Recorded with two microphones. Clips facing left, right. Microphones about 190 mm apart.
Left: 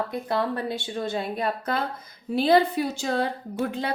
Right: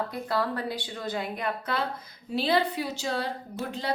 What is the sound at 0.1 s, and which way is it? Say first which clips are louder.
A woman's voice: left 3 dB; 20° left (ahead or behind).